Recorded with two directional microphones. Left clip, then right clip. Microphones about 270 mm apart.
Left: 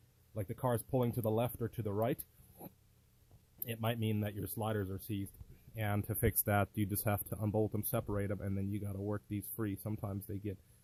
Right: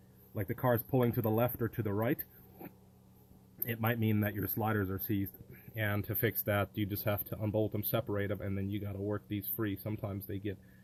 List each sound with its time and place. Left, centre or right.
0.3 s speech: centre
3.6 s speech: centre
5.7 s speech: left